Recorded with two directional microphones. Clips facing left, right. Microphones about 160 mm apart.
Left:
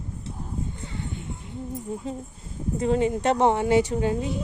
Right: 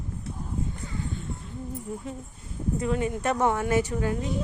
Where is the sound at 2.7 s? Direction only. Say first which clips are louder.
Left 5 dB; 30° left (ahead or behind).